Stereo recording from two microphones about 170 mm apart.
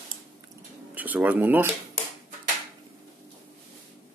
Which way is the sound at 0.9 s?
10° right (ahead or behind).